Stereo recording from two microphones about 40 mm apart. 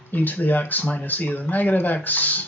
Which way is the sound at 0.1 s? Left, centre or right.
Left.